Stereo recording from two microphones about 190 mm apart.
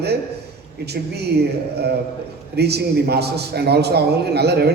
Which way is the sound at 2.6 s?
60° right (ahead or behind).